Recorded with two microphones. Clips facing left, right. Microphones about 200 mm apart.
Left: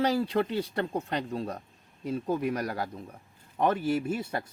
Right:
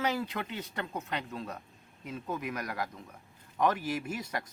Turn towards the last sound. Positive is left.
turn(degrees=25)  # may be behind; listen again after turning